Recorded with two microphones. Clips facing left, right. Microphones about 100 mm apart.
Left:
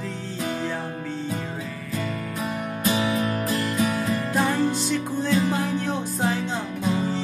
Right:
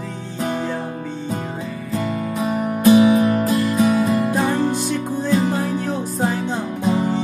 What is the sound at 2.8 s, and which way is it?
Music, 25° right (ahead or behind).